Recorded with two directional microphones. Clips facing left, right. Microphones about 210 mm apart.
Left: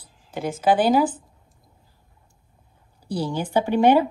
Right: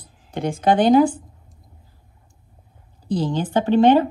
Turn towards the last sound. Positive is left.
turn(degrees=10)  # may be behind; listen again after turning